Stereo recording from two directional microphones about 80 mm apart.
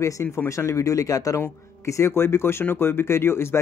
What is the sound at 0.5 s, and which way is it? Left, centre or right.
Speech, left.